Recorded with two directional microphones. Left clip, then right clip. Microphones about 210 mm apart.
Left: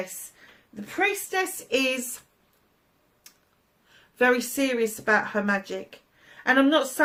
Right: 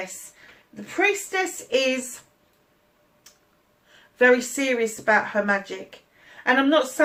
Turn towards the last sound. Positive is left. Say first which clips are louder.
# right 2 dB
turn(degrees=40)  # may be behind; listen again after turning